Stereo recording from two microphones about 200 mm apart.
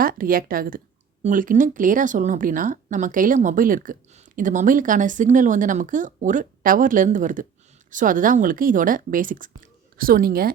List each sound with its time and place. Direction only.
0.0 s speech: 45° right (ahead or behind)